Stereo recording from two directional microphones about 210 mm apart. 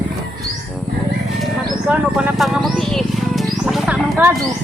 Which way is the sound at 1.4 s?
5° right (ahead or behind).